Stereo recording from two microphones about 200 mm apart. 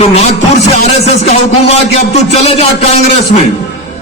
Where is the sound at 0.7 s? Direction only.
30° left (ahead or behind).